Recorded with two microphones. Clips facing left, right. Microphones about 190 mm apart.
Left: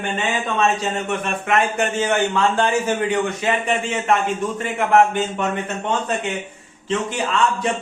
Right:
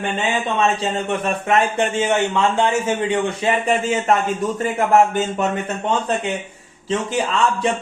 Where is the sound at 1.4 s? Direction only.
25° right (ahead or behind).